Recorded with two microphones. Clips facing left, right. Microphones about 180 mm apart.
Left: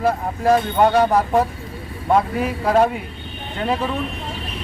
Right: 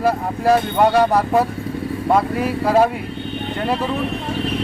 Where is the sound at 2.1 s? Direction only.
5° right (ahead or behind).